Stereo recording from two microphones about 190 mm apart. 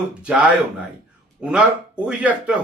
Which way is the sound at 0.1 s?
5° right (ahead or behind).